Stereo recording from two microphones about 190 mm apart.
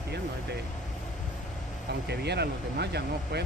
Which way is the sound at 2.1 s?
60° right (ahead or behind).